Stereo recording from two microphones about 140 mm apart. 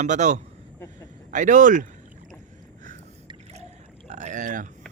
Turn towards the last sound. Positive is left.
turn(degrees=-65)  # may be behind; listen again after turning